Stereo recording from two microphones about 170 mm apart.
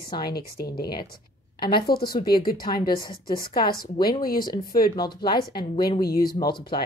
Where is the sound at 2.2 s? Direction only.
60° left (ahead or behind).